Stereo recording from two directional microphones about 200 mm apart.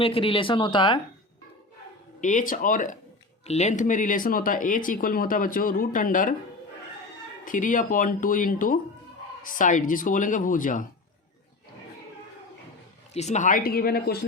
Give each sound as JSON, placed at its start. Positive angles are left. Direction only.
{"t": 0.0, "sound": "speech", "side_deg": 25}
{"t": 2.2, "sound": "speech", "side_deg": 40}
{"t": 7.4, "sound": "speech", "side_deg": 40}
{"t": 13.1, "sound": "speech", "side_deg": 35}